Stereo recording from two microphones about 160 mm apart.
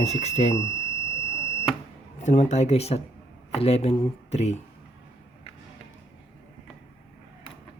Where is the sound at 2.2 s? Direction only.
45° left (ahead or behind).